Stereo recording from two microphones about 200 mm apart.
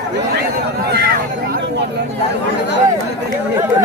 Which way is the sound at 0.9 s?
50° right (ahead or behind).